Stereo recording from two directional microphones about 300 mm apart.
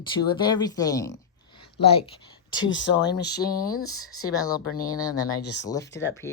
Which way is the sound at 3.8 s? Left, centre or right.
Centre.